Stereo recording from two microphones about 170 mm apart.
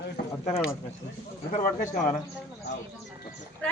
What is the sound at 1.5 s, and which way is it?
Speech, 50° left (ahead or behind).